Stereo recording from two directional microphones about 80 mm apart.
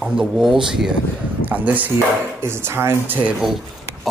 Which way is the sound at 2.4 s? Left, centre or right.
Right.